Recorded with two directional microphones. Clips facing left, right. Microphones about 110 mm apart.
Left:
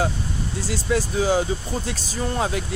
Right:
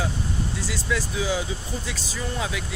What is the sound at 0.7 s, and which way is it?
Speech, 45° left (ahead or behind).